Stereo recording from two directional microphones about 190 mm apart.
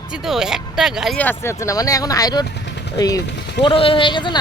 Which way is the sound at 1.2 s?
10° left (ahead or behind).